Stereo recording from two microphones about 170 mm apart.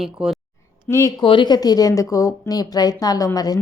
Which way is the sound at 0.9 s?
15° right (ahead or behind).